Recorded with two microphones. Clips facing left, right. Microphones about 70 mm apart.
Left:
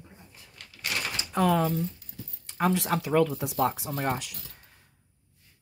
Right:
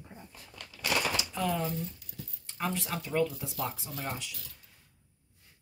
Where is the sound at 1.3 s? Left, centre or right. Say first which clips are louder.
Left 8 dB; left.